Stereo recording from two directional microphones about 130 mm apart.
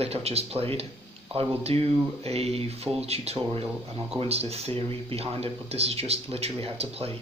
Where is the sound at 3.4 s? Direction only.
40° right (ahead or behind).